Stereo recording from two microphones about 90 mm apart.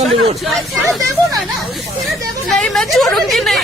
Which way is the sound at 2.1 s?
Centre (ahead or behind).